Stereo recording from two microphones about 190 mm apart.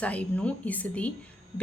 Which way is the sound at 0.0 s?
5° left (ahead or behind).